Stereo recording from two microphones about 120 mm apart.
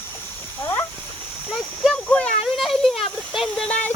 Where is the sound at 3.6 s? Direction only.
10° left (ahead or behind).